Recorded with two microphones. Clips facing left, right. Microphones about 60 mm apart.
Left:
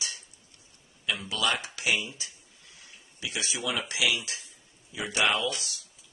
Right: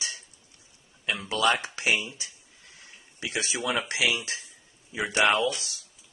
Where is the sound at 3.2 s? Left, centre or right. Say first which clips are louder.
Right 3 dB; right.